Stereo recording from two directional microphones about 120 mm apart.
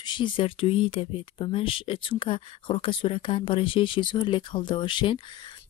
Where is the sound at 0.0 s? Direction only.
40° left (ahead or behind).